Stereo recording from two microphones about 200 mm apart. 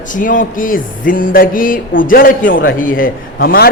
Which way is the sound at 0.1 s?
40° left (ahead or behind).